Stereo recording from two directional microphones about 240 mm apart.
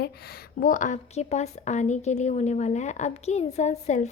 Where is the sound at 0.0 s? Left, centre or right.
Left.